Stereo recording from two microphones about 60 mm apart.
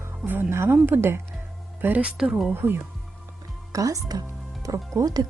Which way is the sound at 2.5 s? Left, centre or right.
Right.